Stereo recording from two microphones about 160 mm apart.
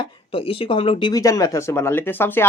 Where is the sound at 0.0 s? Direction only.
35° left (ahead or behind).